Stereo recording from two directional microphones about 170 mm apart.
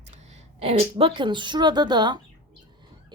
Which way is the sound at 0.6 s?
35° right (ahead or behind).